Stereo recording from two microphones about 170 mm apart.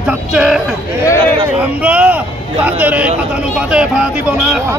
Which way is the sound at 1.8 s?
10° right (ahead or behind).